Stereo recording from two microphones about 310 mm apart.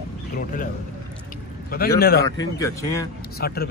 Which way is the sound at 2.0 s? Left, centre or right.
Left.